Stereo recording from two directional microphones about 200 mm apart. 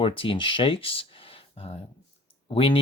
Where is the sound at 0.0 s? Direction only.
25° left (ahead or behind).